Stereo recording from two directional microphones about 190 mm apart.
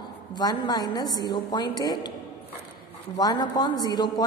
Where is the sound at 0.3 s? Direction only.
20° left (ahead or behind).